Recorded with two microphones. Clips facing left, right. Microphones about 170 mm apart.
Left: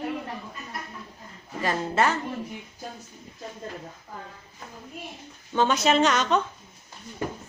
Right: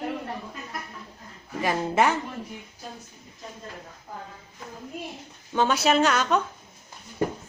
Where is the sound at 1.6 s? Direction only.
15° right (ahead or behind).